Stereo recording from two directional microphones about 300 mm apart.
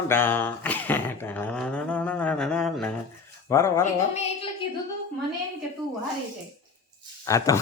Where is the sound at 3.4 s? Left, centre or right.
Centre.